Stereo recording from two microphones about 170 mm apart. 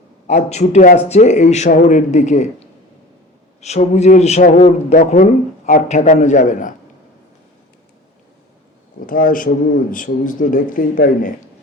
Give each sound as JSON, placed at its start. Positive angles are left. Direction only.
{"t": 0.3, "sound": "a man's voice", "side_deg": 45}
{"t": 9.0, "sound": "a man's voice", "side_deg": 55}